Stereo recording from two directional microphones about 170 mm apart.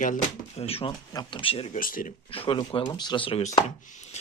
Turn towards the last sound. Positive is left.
turn(degrees=45)  # may be behind; listen again after turning